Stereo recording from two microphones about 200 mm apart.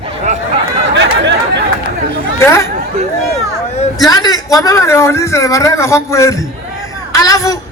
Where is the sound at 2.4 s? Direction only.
15° left (ahead or behind).